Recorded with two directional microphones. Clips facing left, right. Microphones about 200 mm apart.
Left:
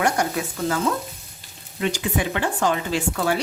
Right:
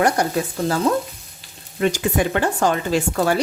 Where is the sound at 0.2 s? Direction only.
35° right (ahead or behind).